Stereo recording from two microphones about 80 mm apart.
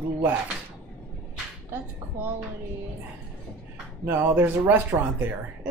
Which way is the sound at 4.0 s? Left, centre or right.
Right.